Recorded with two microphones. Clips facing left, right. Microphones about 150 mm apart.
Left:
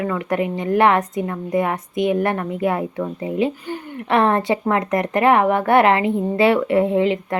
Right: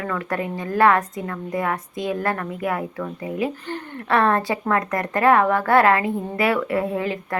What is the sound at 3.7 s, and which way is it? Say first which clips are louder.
A woman's voice: left 2 dB; 10° left (ahead or behind).